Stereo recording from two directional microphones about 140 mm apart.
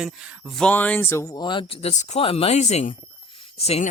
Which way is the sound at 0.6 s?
10° left (ahead or behind).